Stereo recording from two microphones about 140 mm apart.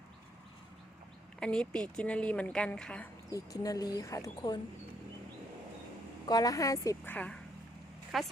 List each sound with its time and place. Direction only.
1.4 s a woman's voice: 5° left (ahead or behind)
3.3 s speech: 25° left (ahead or behind)
4.4 s speech: 35° left (ahead or behind)
6.2 s speech: 25° left (ahead or behind)
7.1 s a woman's voice: 10° left (ahead or behind)